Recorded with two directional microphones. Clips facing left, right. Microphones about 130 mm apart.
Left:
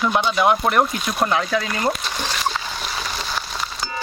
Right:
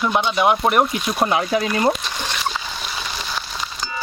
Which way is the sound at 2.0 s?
Centre (ahead or behind).